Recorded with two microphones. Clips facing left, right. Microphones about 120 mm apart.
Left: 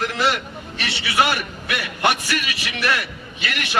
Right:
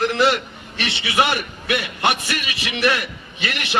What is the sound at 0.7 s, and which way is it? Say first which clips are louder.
A man's voice: right 1 dB; 25° right (ahead or behind).